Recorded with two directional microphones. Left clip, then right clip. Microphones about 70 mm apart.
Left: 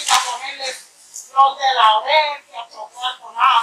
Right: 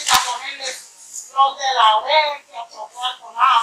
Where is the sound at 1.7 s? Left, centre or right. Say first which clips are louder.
Left 1 dB; left.